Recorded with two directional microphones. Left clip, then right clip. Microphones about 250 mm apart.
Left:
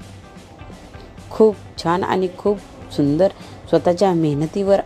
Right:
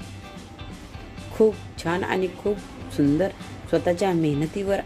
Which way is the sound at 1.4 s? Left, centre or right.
Left.